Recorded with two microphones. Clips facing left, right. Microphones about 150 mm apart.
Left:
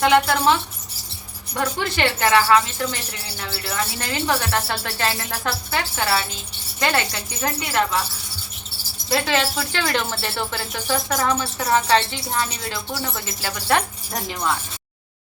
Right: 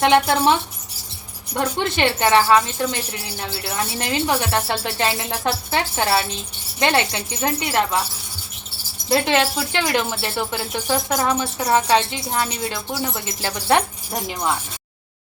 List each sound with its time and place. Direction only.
0.0 s speech: 25° right (ahead or behind)
1.5 s speech: 25° right (ahead or behind)
9.0 s speech: 20° right (ahead or behind)